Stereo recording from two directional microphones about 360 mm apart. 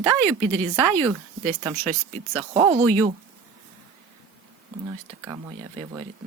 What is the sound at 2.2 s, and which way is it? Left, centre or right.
Speech, centre.